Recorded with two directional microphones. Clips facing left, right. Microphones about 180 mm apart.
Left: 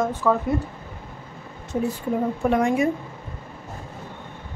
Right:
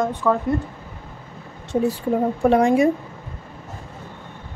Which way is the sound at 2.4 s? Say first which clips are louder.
Right 5 dB; 30° right (ahead or behind).